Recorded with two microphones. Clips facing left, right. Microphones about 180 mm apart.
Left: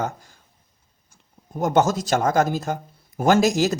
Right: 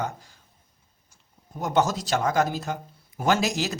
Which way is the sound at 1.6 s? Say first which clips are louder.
Left 4 dB; 45° left (ahead or behind).